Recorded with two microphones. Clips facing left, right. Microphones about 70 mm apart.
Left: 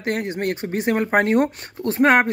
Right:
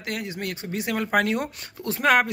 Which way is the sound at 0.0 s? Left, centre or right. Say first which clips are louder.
Left 7 dB; left.